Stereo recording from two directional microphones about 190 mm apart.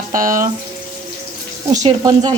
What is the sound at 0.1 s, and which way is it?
Speech, 45° right (ahead or behind).